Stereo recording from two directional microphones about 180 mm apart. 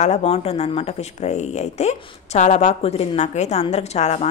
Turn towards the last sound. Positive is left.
turn(degrees=40)  # may be behind; listen again after turning